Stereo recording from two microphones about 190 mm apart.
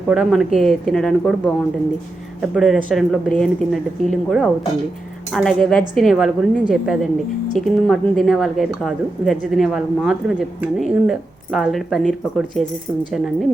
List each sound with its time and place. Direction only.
0.1 s speech: centre (ahead or behind)
2.4 s speech: centre (ahead or behind)